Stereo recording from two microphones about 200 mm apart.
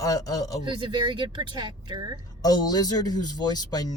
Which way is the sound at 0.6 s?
25° right (ahead or behind).